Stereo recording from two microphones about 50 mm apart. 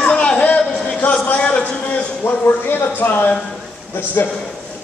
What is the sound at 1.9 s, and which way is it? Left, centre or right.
Speech, left.